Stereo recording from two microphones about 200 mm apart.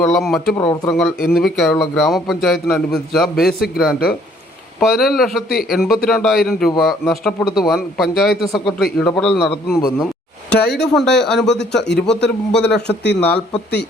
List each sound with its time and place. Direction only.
0.0 s a man's voice: centre (ahead or behind)
0.5 s speech: 20° left (ahead or behind)
0.9 s a man's voice: 5° left (ahead or behind)
10.5 s speech: 55° left (ahead or behind)
10.9 s a man's voice: centre (ahead or behind)
11.8 s speech: 60° left (ahead or behind)
12.0 s a man's voice: 5° left (ahead or behind)
12.9 s speech: 60° left (ahead or behind)